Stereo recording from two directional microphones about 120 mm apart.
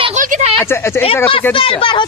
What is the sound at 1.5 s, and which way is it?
Speech, 45° left (ahead or behind).